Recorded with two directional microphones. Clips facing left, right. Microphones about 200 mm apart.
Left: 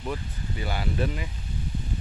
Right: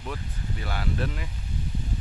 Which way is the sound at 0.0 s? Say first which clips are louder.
Left 3 dB; 5° left (ahead or behind).